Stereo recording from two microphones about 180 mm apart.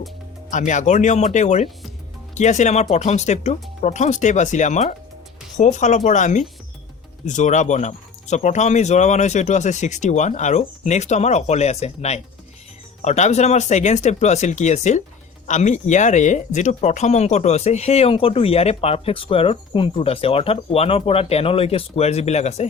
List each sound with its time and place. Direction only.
0.5 s speech: 45° left (ahead or behind)